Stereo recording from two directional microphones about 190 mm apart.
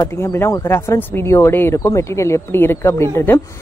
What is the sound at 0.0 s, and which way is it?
Speech, 15° left (ahead or behind).